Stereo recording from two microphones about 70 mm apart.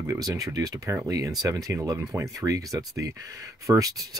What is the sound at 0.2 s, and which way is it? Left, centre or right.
Speech, right.